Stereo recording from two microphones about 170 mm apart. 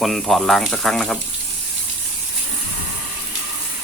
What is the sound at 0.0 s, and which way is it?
Speech, centre (ahead or behind).